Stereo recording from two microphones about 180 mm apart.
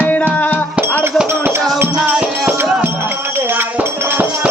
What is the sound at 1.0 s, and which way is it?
Speech, 10° right (ahead or behind).